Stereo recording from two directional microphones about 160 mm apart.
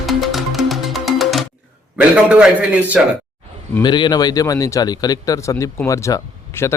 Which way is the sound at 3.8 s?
30° left (ahead or behind).